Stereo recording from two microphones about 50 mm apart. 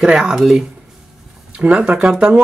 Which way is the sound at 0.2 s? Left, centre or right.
Centre.